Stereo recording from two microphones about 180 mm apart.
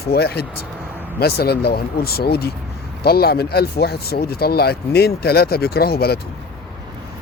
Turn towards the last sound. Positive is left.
turn(degrees=60)  # may be behind; listen again after turning